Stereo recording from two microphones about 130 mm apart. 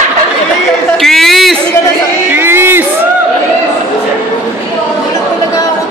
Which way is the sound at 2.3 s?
15° right (ahead or behind).